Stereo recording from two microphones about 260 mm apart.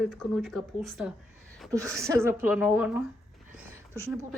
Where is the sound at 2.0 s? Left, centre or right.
Centre.